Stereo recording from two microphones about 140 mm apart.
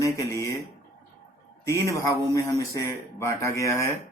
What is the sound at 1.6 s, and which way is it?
Speech, 20° left (ahead or behind).